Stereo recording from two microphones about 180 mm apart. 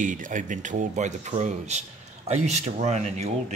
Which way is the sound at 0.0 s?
45° right (ahead or behind).